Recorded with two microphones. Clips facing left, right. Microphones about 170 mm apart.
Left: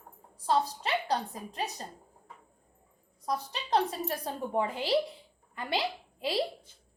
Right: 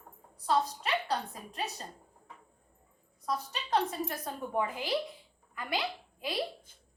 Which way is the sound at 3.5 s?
30° left (ahead or behind).